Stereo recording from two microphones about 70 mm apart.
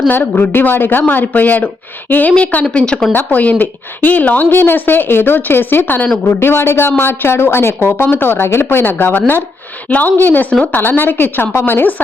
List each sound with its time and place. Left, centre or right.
0.1 s speech: left
3.1 s speech: left
10.8 s speech: left